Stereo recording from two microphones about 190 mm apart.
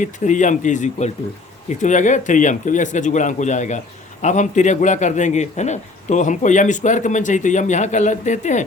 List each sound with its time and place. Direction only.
0.0 s a man's voice: 40° left (ahead or behind)